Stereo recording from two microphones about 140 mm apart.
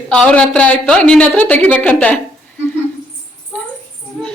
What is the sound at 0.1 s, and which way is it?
A woman's voice, 5° left (ahead or behind).